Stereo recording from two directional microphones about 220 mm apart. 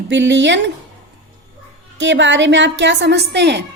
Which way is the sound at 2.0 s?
55° right (ahead or behind).